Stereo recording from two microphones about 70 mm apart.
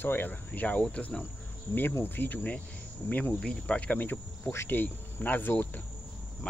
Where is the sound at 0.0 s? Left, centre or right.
Left.